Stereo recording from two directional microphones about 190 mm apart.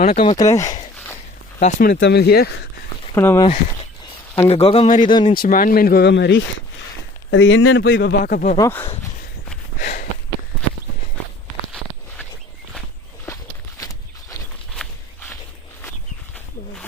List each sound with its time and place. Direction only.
0.0 s speech: 35° left (ahead or behind)
0.4 s speech: 15° left (ahead or behind)
1.5 s speech: 45° left (ahead or behind)
2.0 s speech: 65° left (ahead or behind)
3.2 s speech: 15° left (ahead or behind)
4.4 s speech: 30° left (ahead or behind)
5.3 s speech: 50° left (ahead or behind); by 6.4 s 65° left (ahead or behind)
7.3 s speech: 85° left; by 8.5 s 45° left (ahead or behind)
8.5 s speech: 15° left (ahead or behind)
9.8 s sniff: 45° left (ahead or behind)
13.2 s walk: 15° left (ahead or behind)
14.8 s walk: centre (ahead or behind)